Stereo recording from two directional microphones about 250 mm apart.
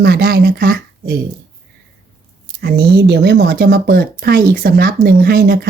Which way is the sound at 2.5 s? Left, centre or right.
Right.